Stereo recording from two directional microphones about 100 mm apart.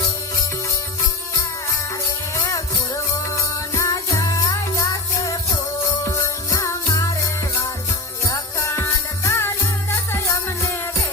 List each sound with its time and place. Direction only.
2.3 s music: 35° left (ahead or behind)
3.8 s music: 35° left (ahead or behind)
6.2 s music: 30° left (ahead or behind)
8.3 s music: 25° left (ahead or behind)